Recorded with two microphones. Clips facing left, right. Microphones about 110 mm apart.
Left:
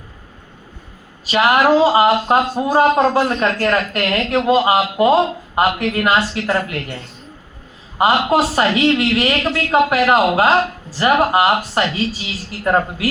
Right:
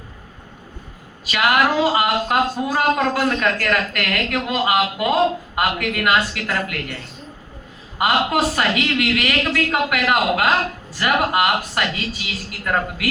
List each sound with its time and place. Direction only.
1.2 s speech: 30° left (ahead or behind)
7.9 s speech: 30° left (ahead or behind)